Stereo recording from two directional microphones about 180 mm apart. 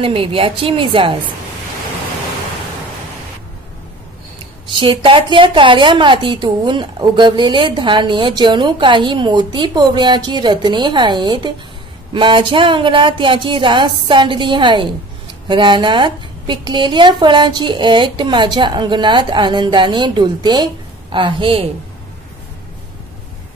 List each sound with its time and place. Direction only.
0.0 s a woman's voice: 30° right (ahead or behind)
4.6 s a woman's voice: 30° right (ahead or behind)